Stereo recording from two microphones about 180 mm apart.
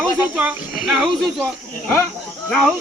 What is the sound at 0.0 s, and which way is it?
Speech, 10° right (ahead or behind).